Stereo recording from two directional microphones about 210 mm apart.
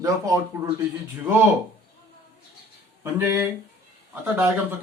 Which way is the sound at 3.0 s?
10° right (ahead or behind).